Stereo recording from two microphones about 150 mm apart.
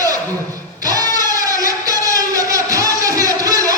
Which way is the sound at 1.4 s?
25° right (ahead or behind).